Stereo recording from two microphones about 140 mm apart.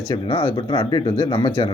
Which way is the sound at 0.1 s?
35° left (ahead or behind).